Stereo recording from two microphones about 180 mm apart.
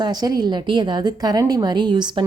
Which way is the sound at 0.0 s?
20° right (ahead or behind).